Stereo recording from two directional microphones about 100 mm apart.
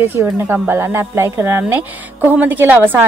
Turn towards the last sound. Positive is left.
turn(degrees=-20)  # may be behind; listen again after turning